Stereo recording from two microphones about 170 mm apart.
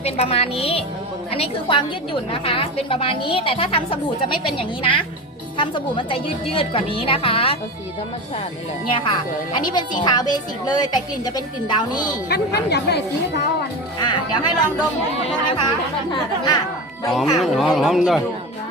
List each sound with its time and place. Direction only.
0.0 s a woman's voice: 35° left (ahead or behind)
8.9 s a woman's voice: 30° left (ahead or behind)
12.3 s speech: 75° left (ahead or behind)
14.0 s a woman's voice: 25° left (ahead or behind)
17.1 s speech: centre (ahead or behind)